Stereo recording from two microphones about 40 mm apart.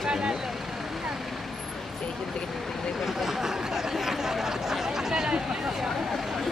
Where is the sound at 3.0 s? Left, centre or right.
Centre.